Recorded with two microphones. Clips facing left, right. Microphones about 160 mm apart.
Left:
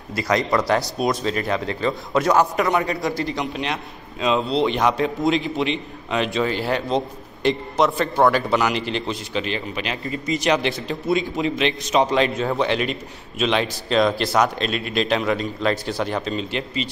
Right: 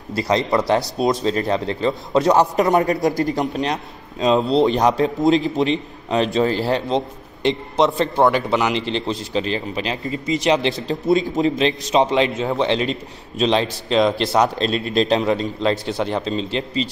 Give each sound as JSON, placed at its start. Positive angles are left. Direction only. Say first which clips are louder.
{"t": 0.1, "sound": "a man's voice", "louder": "right 2 dB", "side_deg": -30}
{"t": 11.1, "sound": "speech", "louder": "right 4 dB", "side_deg": -35}
{"t": 11.9, "sound": "a man's voice", "louder": "right 1 dB", "side_deg": -25}
{"t": 13.8, "sound": "a man's voice", "louder": "right 1 dB", "side_deg": -20}